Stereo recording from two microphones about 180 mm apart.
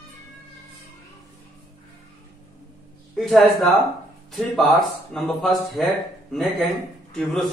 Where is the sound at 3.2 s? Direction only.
Centre (ahead or behind).